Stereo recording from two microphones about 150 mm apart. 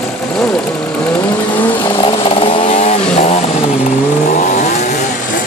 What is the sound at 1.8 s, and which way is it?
Chainsaw, 35° left (ahead or behind).